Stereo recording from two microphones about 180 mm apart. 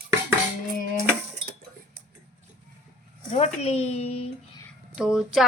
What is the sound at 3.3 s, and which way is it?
Speech, 35° left (ahead or behind).